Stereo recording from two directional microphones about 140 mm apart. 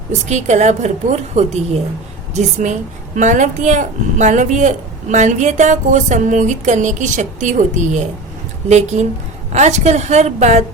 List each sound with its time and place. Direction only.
0.3 s speech: 55° right (ahead or behind)
9.5 s a woman's voice: 55° right (ahead or behind)